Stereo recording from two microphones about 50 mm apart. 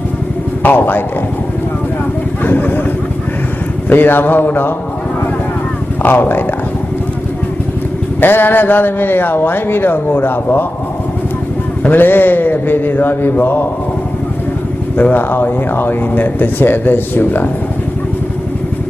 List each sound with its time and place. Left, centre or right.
0.7 s speech: left
2.4 s speech: left
3.9 s speech: left
6.0 s speech: left
8.2 s speech: left
11.9 s speech: left
15.0 s speech: left